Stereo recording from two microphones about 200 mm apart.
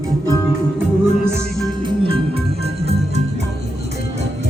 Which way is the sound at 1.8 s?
25° right (ahead or behind).